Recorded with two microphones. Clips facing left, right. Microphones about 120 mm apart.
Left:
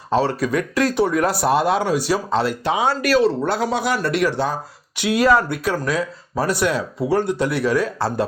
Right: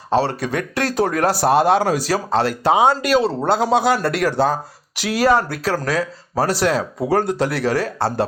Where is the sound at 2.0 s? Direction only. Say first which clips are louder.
Even; 90° right.